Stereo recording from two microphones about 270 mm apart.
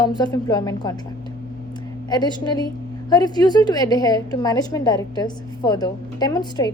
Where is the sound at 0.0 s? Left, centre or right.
Centre.